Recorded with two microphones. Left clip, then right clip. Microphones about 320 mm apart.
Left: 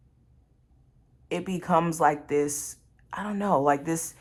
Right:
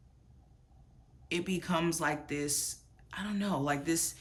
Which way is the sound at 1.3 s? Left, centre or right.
Centre.